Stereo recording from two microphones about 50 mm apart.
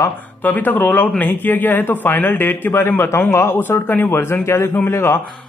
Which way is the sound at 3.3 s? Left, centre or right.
Left.